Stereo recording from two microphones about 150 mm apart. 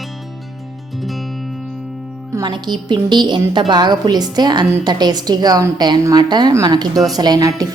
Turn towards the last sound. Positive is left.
turn(degrees=-25)  # may be behind; listen again after turning